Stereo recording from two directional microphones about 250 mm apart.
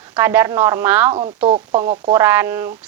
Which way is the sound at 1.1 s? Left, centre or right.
Right.